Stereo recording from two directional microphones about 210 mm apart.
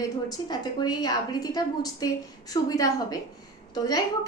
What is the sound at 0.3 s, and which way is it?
A woman's voice, 20° left (ahead or behind).